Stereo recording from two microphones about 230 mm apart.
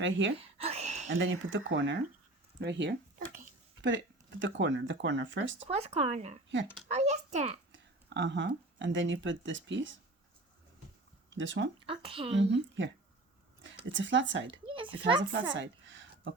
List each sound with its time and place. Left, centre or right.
0.0 s speech: right
0.3 s a sound: right
1.1 s speech: right
5.5 s a child's voice: right
7.7 s speech: right
11.3 s speech: right
11.9 s speech: right
12.4 s speech: right
13.9 s speech: right
14.7 s speech: right
15.5 s a sound: right